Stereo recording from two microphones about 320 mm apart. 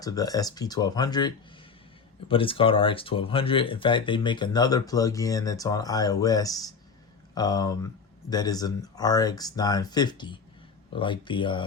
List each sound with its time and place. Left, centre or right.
0.0 s speech: centre